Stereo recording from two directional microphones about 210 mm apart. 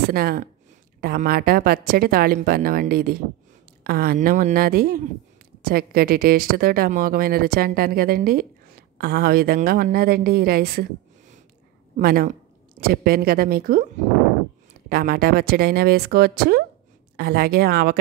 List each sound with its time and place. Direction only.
0.1 s speech: 45° right (ahead or behind)
14.9 s speech: 45° right (ahead or behind)